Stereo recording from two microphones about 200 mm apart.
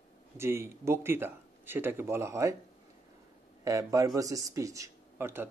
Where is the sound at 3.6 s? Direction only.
15° right (ahead or behind).